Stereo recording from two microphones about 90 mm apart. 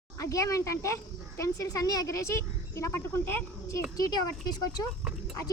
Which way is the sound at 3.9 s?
45° left (ahead or behind).